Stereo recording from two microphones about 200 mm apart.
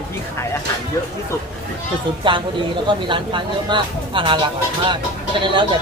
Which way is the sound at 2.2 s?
25° right (ahead or behind).